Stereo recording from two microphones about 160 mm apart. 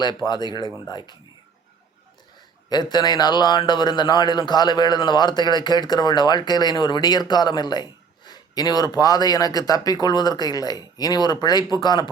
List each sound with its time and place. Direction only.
0.0 s speech: 30° left (ahead or behind)
2.6 s speech: 25° left (ahead or behind)